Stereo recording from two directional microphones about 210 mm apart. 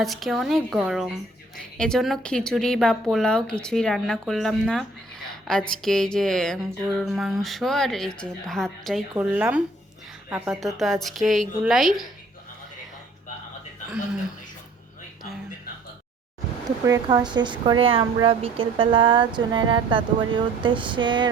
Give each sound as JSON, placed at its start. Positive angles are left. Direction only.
{"t": 0.0, "sound": "a woman's voice", "side_deg": 0}
{"t": 5.3, "sound": "a sound", "side_deg": 5}
{"t": 5.7, "sound": "a woman's voice", "side_deg": 0}
{"t": 16.6, "sound": "speech", "side_deg": -15}